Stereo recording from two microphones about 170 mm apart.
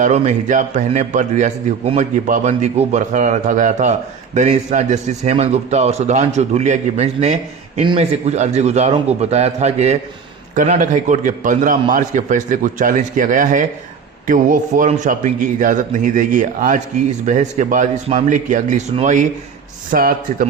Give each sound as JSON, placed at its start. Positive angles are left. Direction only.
{"t": 0.0, "sound": "a man's voice", "side_deg": -45}
{"t": 19.9, "sound": "a man's voice", "side_deg": -55}